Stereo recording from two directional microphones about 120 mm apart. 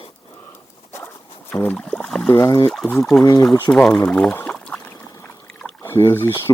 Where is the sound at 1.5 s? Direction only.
15° left (ahead or behind).